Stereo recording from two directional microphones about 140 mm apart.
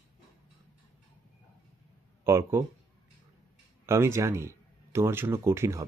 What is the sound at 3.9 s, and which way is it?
Speech, 20° right (ahead or behind).